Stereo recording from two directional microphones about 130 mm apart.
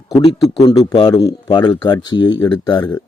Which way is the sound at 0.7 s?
30° left (ahead or behind).